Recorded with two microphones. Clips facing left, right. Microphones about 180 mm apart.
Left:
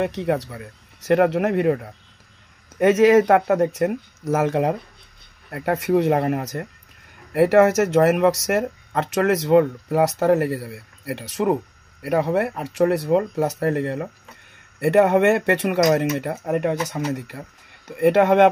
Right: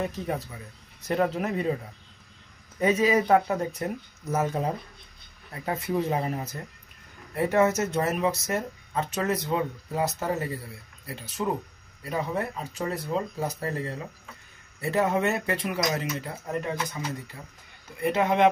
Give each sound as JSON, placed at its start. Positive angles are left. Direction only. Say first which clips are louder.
{"t": 0.0, "sound": "speech", "louder": "left 8 dB", "side_deg": 75}
{"t": 12.0, "sound": "speech", "louder": "left 9 dB", "side_deg": 70}